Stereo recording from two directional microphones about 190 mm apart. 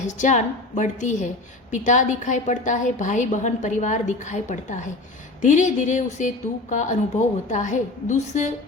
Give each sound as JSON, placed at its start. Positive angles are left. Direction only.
{"t": 0.0, "sound": "a woman's voice", "side_deg": 40}